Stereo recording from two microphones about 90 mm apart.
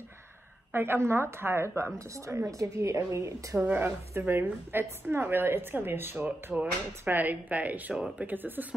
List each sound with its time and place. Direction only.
0.7 s a woman's voice: 25° right (ahead or behind)
3.5 s a woman's voice: 20° right (ahead or behind)